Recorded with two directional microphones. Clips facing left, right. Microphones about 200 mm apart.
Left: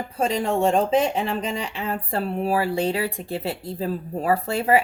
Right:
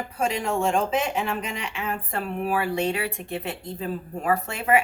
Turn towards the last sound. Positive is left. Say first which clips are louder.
# left 3 dB
turn(degrees=35)  # may be behind; listen again after turning